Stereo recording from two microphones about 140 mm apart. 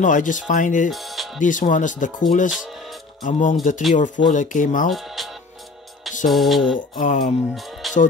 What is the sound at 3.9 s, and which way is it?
Speech, 65° left (ahead or behind).